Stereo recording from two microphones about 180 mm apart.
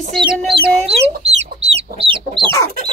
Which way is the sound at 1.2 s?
35° right (ahead or behind).